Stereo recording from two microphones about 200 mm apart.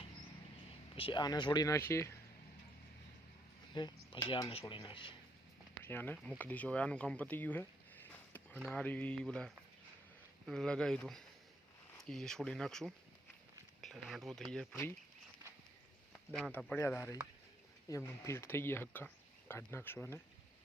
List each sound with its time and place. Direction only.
0.9 s speech: 25° left (ahead or behind)
3.8 s speech: 20° left (ahead or behind)
5.8 s speech: 10° left (ahead or behind)
16.3 s speech: centre (ahead or behind)